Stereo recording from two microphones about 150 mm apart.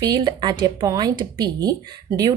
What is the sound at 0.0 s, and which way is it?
Speech, 25° right (ahead or behind).